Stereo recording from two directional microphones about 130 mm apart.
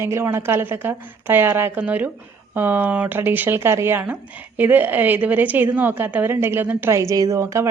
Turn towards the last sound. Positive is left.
turn(degrees=-25)  # may be behind; listen again after turning